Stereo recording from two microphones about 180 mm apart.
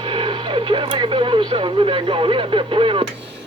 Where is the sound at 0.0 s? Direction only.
30° right (ahead or behind).